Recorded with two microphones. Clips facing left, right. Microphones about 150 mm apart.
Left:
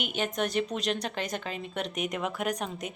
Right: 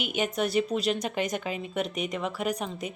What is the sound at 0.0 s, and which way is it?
A woman's voice, 10° right (ahead or behind).